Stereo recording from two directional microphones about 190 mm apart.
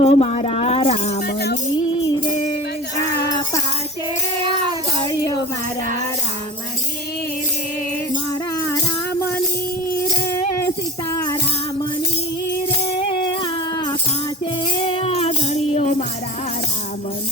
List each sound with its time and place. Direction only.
0.0 s a sound: 35° left (ahead or behind)
1.3 s music: 60° left (ahead or behind)
1.9 s music: 25° left (ahead or behind)
13.0 s music: 25° left (ahead or behind)